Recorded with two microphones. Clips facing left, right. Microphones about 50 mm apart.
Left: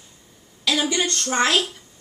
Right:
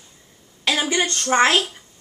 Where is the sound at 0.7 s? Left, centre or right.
Right.